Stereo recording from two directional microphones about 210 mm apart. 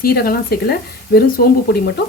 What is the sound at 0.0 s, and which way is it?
Speech, 45° left (ahead or behind).